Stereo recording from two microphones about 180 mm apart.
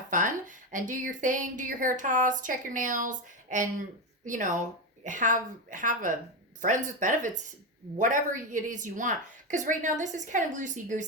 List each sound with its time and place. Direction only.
0.1 s speech: 45° right (ahead or behind)